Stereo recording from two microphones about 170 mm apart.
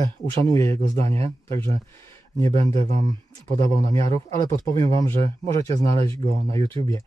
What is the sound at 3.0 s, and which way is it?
Speech, 20° left (ahead or behind).